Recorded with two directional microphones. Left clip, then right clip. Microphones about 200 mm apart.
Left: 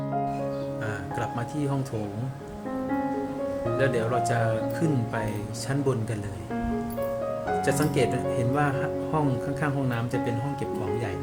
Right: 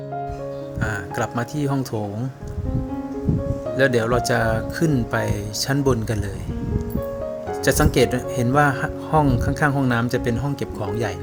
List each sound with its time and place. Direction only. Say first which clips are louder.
1.2 s speech: right 6 dB; 40° right (ahead or behind)
3.8 s speech: right 8 dB; 45° right (ahead or behind)
7.6 s speech: right 9 dB; 40° right (ahead or behind)